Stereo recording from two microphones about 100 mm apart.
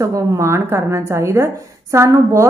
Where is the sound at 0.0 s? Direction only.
30° right (ahead or behind).